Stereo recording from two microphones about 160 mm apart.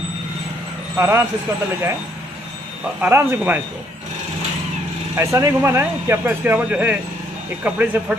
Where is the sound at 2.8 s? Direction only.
10° right (ahead or behind).